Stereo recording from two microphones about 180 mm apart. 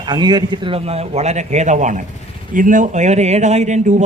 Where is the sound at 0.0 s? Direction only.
25° right (ahead or behind).